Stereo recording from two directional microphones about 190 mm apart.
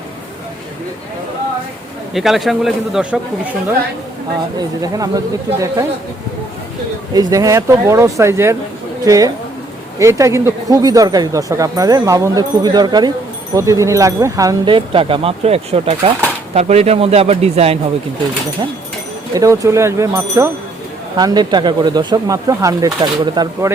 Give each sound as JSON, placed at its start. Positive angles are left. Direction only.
{"t": 2.1, "sound": "a man's voice", "side_deg": 0}
{"t": 4.5, "sound": "speech", "side_deg": -20}
{"t": 7.1, "sound": "speech", "side_deg": -20}
{"t": 19.3, "sound": "speech", "side_deg": -15}